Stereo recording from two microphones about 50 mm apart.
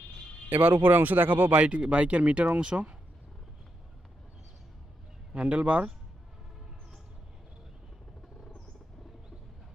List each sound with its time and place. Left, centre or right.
0.5 s speech: right
1.6 s speech: right
5.3 s speech: right